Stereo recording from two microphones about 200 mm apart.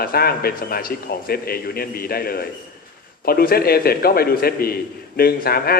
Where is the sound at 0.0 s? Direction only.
50° left (ahead or behind).